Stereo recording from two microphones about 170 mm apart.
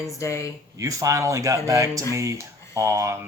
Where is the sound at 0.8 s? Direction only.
20° right (ahead or behind).